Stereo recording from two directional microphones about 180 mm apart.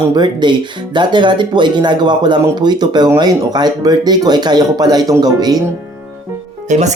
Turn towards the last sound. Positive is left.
turn(degrees=-40)  # may be behind; listen again after turning